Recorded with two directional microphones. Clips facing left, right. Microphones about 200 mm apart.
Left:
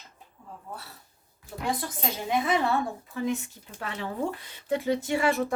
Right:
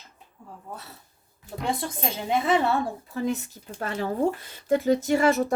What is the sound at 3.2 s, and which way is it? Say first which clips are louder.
A woman's voice: right 2 dB; 40° right (ahead or behind).